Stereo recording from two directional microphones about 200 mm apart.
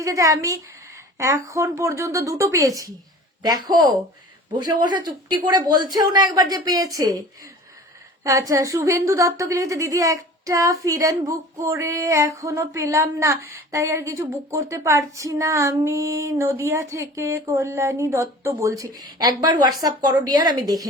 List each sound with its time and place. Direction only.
0.0 s a woman's voice: 15° right (ahead or behind)
8.2 s a woman's voice: 15° right (ahead or behind)